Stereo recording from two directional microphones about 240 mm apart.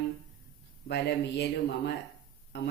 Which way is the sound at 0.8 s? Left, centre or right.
Left.